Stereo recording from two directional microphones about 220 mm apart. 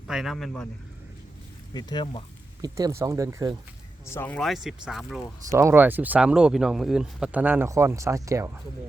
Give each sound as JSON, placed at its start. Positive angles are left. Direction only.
{"t": 0.1, "sound": "speech", "side_deg": 0}
{"t": 1.7, "sound": "speech", "side_deg": 20}
{"t": 2.6, "sound": "speech", "side_deg": -15}
{"t": 4.0, "sound": "speech", "side_deg": 10}
{"t": 5.5, "sound": "speech", "side_deg": -10}